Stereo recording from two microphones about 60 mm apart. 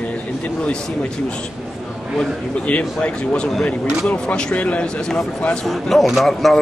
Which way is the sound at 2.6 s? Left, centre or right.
Left.